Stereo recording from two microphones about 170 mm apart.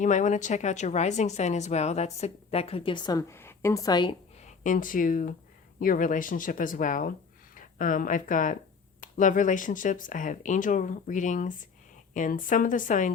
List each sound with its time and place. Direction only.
0.0 s speech: 45° left (ahead or behind); by 4.1 s 25° left (ahead or behind)
4.4 s speech: 50° left (ahead or behind)